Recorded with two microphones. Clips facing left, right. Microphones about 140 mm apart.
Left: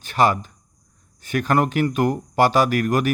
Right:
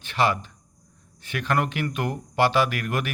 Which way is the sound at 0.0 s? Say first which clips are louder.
Left 5 dB; 40° left (ahead or behind).